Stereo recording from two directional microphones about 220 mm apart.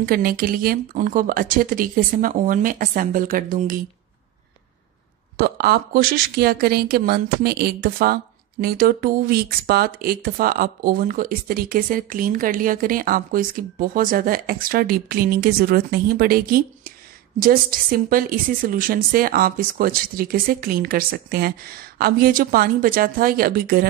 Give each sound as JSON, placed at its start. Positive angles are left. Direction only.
{"t": 0.0, "sound": "a woman's voice", "side_deg": -40}
{"t": 5.4, "sound": "a woman's voice", "side_deg": -45}